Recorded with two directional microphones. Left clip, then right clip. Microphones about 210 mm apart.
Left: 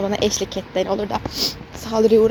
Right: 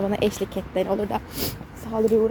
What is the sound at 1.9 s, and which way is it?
Speech, 20° left (ahead or behind).